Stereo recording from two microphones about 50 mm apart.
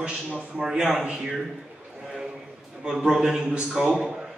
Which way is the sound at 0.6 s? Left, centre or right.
Centre.